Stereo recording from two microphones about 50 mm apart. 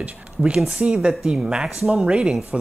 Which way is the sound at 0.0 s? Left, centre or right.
Right.